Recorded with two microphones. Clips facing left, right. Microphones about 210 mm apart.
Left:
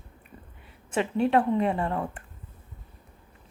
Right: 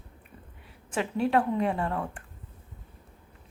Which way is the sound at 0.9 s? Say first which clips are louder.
Left 2 dB; centre (ahead or behind).